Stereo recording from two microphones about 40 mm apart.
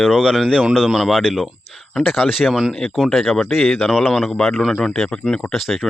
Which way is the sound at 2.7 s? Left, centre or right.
Centre.